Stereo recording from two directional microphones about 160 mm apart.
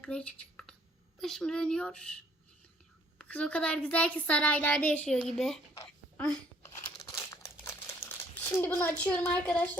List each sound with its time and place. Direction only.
0.0 s computer keyboard: 5° left (ahead or behind)
1.2 s speech: 5° left (ahead or behind)
3.2 s a woman's voice: 5° left (ahead or behind)
6.8 s crumpling: 15° left (ahead or behind)